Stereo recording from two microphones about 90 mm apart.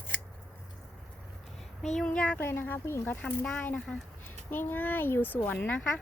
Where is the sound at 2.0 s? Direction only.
10° left (ahead or behind).